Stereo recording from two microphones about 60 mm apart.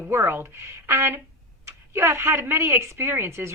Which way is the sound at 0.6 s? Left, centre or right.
Right.